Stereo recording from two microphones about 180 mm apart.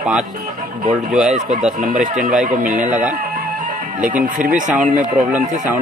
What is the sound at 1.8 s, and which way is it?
Speech, 50° right (ahead or behind).